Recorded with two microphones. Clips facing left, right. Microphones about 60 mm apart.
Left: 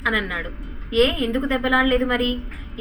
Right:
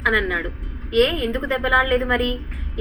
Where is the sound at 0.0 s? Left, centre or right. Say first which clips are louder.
Right 3 dB; centre.